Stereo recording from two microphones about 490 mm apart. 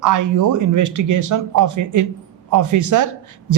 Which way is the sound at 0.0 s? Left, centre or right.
Right.